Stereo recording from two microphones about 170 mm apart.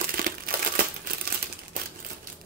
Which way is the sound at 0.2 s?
60° right (ahead or behind).